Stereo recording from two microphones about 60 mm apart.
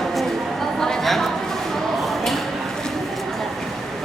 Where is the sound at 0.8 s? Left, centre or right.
Centre.